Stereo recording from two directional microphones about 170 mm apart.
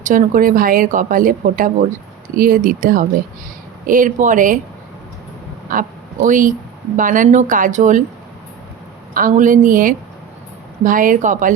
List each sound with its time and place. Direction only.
0.0 s speech: 50° right (ahead or behind)
6.2 s speech: 50° right (ahead or behind)
9.1 s speech: 50° right (ahead or behind)